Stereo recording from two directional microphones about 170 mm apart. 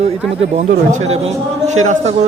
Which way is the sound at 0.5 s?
45° right (ahead or behind).